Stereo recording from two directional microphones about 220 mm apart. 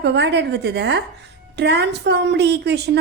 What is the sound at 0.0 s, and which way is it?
A woman's voice, 50° right (ahead or behind).